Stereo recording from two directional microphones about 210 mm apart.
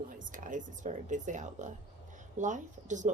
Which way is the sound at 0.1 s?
40° right (ahead or behind).